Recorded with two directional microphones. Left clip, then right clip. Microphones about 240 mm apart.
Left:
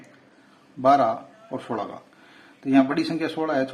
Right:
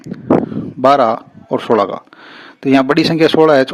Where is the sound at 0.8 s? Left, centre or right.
Right.